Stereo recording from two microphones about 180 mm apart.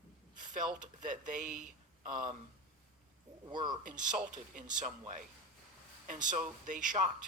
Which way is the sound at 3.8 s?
45° right (ahead or behind).